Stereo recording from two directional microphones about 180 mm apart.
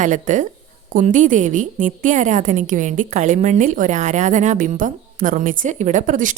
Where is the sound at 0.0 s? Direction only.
45° right (ahead or behind).